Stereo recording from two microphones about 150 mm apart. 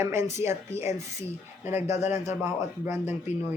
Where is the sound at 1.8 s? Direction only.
50° left (ahead or behind).